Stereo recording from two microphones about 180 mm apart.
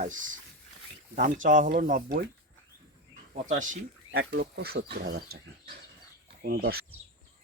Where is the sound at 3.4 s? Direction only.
45° right (ahead or behind).